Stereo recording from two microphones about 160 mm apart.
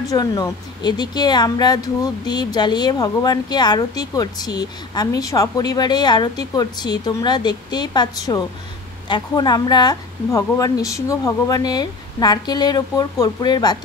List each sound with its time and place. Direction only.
0.1 s speech: 20° left (ahead or behind)